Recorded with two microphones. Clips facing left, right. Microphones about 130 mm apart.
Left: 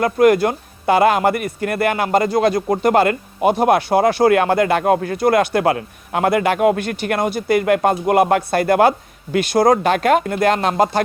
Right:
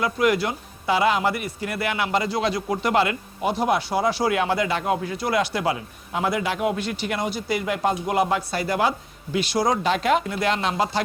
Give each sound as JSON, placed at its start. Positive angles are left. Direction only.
{"t": 0.0, "sound": "speech", "side_deg": 50}